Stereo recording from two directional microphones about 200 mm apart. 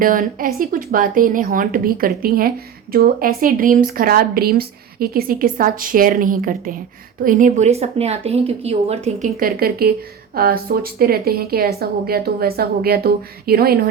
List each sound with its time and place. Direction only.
0.0 s speech: 45° right (ahead or behind)